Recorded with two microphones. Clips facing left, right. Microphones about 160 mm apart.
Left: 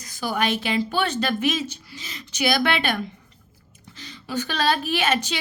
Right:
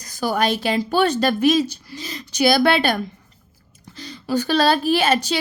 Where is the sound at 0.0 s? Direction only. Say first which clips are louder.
Right 4 dB; 40° right (ahead or behind).